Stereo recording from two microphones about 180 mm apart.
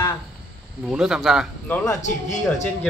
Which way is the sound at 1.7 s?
15° left (ahead or behind).